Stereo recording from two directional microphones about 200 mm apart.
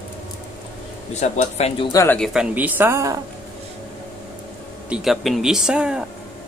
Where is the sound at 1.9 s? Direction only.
15° left (ahead or behind).